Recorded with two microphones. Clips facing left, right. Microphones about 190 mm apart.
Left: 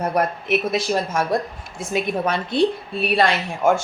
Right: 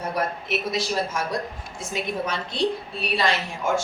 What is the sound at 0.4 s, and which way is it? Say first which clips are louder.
A woman's voice: left 5 dB; 60° left (ahead or behind).